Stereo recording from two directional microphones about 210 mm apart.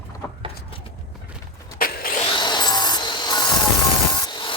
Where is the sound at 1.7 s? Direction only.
45° left (ahead or behind).